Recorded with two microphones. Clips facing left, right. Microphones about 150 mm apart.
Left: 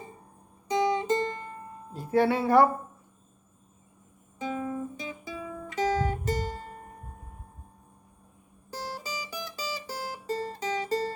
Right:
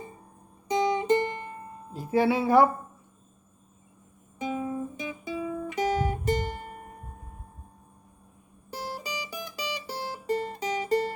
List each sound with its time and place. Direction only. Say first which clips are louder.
0.7 s music: right 2 dB; 20° right (ahead or behind)
1.9 s speech: even; 5° right (ahead or behind)
4.4 s guitar: right 1 dB; 15° right (ahead or behind)
9.0 s music: right 1 dB; 15° right (ahead or behind)